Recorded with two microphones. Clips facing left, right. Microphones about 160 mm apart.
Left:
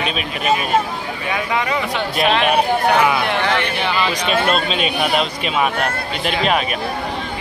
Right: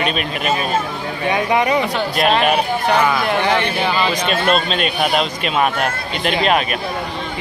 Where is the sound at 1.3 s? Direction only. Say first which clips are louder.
Right 4 dB; 20° right (ahead or behind).